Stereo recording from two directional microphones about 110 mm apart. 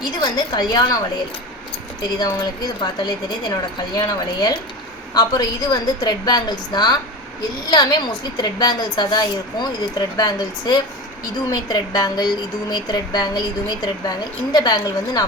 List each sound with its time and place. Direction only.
0.0 s a woman's voice: 40° left (ahead or behind)